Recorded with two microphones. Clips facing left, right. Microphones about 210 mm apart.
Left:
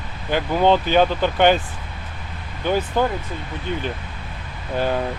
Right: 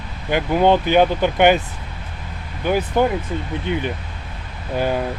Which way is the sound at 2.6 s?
10° right (ahead or behind).